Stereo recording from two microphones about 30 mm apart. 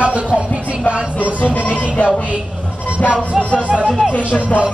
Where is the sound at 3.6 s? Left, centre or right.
Right.